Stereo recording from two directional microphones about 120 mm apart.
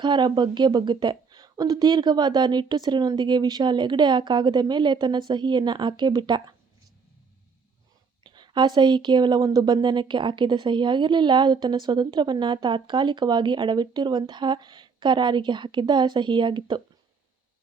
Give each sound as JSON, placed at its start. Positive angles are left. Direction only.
{"t": 0.0, "sound": "a woman's voice", "side_deg": -40}
{"t": 8.2, "sound": "a woman's voice", "side_deg": -40}